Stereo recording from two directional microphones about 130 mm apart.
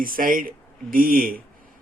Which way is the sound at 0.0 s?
90° right.